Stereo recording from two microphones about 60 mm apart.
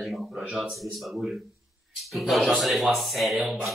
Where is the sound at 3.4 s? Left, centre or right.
Centre.